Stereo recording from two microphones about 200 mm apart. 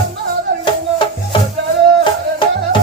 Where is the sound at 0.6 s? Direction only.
25° left (ahead or behind).